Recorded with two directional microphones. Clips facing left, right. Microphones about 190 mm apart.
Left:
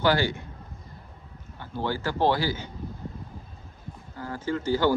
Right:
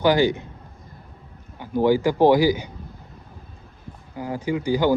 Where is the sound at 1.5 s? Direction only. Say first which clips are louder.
Right 11 dB; 15° right (ahead or behind).